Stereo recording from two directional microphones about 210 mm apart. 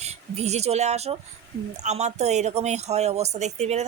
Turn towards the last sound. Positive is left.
turn(degrees=-30)  # may be behind; listen again after turning